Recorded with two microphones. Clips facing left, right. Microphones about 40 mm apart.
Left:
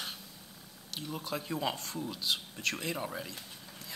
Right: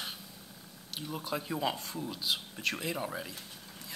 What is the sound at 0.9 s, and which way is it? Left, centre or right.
Speech, centre.